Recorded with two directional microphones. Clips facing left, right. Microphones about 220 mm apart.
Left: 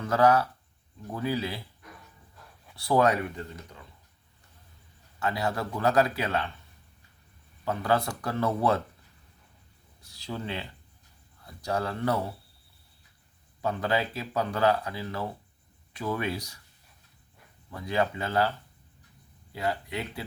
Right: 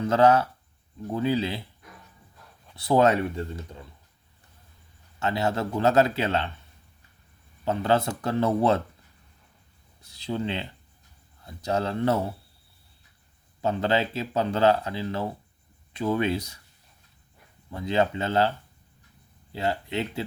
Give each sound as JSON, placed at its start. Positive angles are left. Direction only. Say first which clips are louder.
{"t": 0.0, "sound": "speech", "louder": "right 3 dB", "side_deg": -25}
{"t": 2.7, "sound": "speech", "louder": "right 3 dB", "side_deg": -20}
{"t": 5.2, "sound": "speech", "louder": "right 3 dB", "side_deg": -25}
{"t": 7.6, "sound": "speech", "louder": "right 3 dB", "side_deg": -25}
{"t": 10.0, "sound": "speech", "louder": "right 6 dB", "side_deg": -20}
{"t": 13.6, "sound": "speech", "louder": "right 4 dB", "side_deg": -25}
{"t": 17.7, "sound": "speech", "louder": "right 4 dB", "side_deg": -25}
{"t": 19.5, "sound": "speech", "louder": "right 3 dB", "side_deg": -25}